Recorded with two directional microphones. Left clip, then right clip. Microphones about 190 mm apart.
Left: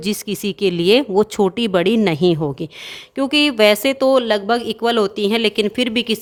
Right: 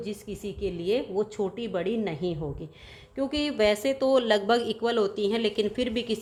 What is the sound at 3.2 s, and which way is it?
A woman's voice, 45° left (ahead or behind).